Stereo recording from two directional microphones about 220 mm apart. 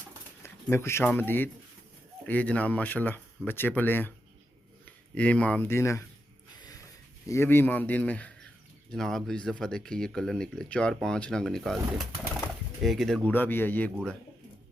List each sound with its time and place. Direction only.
0.4 s speech: 10° left (ahead or behind)
5.1 s speech: 5° left (ahead or behind)
6.6 s a sound: 15° left (ahead or behind)
7.3 s speech: 10° left (ahead or behind)